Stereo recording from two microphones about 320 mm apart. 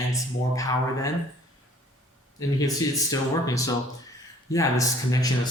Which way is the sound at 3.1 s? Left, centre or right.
Centre.